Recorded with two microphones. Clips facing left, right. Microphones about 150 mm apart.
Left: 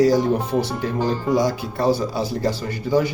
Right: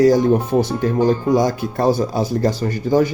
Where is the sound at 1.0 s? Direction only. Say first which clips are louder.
Right 4 dB; 50° right (ahead or behind).